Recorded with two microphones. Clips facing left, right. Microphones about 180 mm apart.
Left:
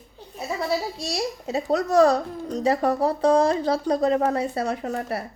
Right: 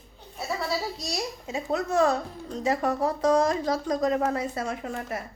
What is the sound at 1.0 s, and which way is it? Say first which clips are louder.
A woman's voice: left 5 dB; 30° left (ahead or behind).